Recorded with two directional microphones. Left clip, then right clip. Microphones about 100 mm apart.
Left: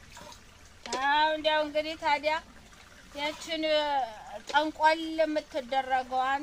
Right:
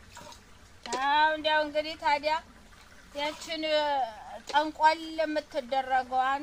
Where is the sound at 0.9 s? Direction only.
20° right (ahead or behind).